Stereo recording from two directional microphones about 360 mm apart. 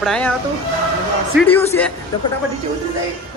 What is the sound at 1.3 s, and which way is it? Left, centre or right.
Speech, centre.